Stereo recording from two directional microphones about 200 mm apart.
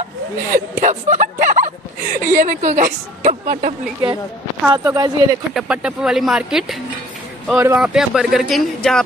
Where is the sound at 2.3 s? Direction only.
40° right (ahead or behind).